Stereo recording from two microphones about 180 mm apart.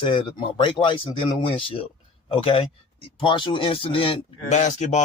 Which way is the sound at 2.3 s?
30° left (ahead or behind).